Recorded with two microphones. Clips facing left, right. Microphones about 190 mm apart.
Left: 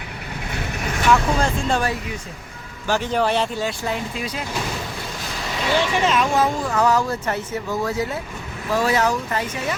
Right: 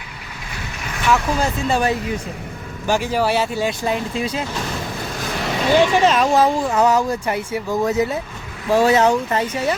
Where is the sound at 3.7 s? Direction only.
25° right (ahead or behind).